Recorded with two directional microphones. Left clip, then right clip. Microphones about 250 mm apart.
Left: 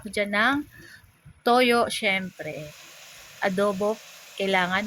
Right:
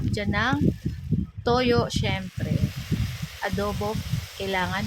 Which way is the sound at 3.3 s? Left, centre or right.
Centre.